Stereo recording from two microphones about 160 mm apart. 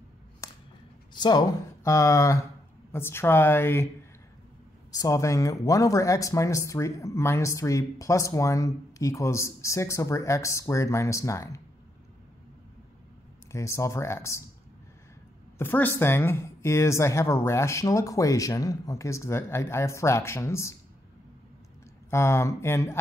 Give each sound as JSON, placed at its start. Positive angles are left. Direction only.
{"t": 0.4, "sound": "a sound", "side_deg": 20}
{"t": 1.1, "sound": "speech", "side_deg": 25}
{"t": 4.9, "sound": "speech", "side_deg": 20}
{"t": 13.5, "sound": "speech", "side_deg": 20}
{"t": 15.5, "sound": "a woman's voice", "side_deg": 10}
{"t": 22.1, "sound": "speech", "side_deg": 15}